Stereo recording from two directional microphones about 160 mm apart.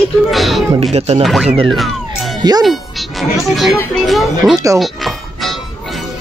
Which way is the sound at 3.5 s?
Centre (ahead or behind).